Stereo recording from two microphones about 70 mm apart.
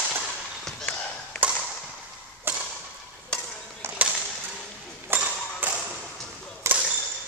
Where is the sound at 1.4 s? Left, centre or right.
Right.